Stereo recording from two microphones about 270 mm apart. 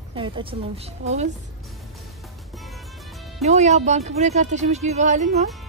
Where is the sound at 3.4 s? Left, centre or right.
Right.